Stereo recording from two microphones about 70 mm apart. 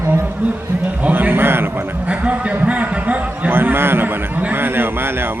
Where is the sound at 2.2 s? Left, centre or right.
Centre.